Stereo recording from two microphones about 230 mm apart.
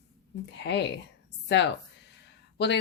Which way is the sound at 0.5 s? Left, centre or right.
Left.